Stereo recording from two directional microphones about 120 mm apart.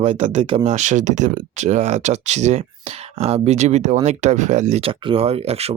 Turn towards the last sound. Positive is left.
turn(degrees=-60)  # may be behind; listen again after turning